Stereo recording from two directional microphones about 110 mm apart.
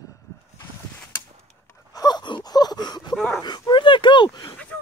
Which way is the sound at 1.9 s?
35° left (ahead or behind).